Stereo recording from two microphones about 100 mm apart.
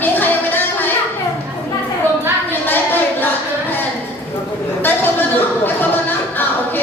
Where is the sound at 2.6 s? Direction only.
20° left (ahead or behind).